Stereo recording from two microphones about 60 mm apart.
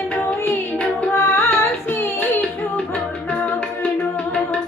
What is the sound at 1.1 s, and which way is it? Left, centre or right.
Music, left.